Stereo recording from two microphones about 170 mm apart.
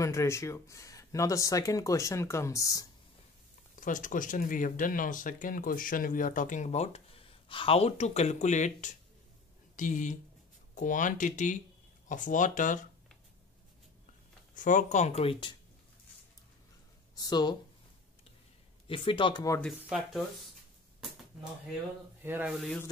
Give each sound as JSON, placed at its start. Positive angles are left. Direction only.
{"t": 0.0, "sound": "speech", "side_deg": 15}
{"t": 3.7, "sound": "speech", "side_deg": 50}
{"t": 14.5, "sound": "speech", "side_deg": 50}
{"t": 17.1, "sound": "speech", "side_deg": 25}
{"t": 18.9, "sound": "speech", "side_deg": 30}
{"t": 19.9, "sound": "speech", "side_deg": 0}
{"t": 22.2, "sound": "speech", "side_deg": -10}